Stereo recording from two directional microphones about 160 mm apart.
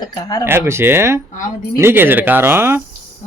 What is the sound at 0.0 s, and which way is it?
Speech, 25° left (ahead or behind).